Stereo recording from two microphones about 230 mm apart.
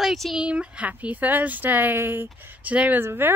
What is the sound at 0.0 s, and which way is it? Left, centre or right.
Speech, centre.